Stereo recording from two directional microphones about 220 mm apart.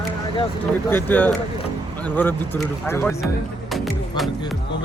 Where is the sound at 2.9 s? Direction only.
10° left (ahead or behind).